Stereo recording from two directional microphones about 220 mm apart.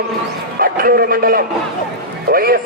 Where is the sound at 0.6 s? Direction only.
40° right (ahead or behind).